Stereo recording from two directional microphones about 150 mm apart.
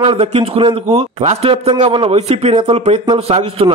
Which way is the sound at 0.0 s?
35° right (ahead or behind).